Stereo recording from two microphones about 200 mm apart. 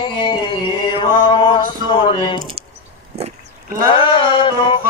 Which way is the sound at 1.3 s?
25° left (ahead or behind).